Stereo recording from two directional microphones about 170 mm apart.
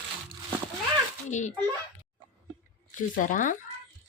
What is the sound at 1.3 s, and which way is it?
Speech, 45° left (ahead or behind).